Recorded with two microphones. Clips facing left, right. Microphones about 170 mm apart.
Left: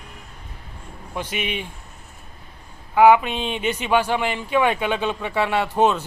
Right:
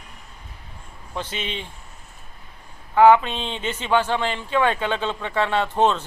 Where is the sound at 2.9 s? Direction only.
10° left (ahead or behind).